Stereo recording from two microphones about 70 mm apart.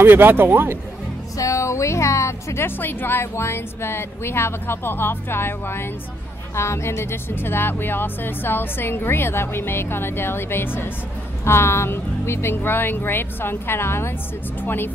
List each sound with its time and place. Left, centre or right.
0.0 s speech: right
1.4 s speech: left